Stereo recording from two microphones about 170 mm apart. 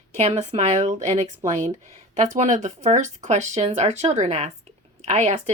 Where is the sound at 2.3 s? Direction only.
45° right (ahead or behind).